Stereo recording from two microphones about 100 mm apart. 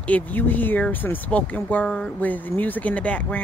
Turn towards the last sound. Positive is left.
turn(degrees=15)  # may be behind; listen again after turning